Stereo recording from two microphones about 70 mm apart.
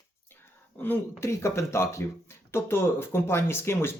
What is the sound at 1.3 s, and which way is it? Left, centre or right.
Speech, left.